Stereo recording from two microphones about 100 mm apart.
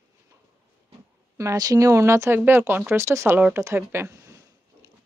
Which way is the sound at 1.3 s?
35° right (ahead or behind).